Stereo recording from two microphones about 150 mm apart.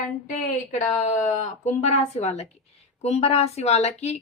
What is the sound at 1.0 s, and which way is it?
Speech, 45° left (ahead or behind).